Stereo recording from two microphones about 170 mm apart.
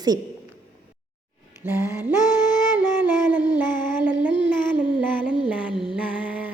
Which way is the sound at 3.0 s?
10° right (ahead or behind).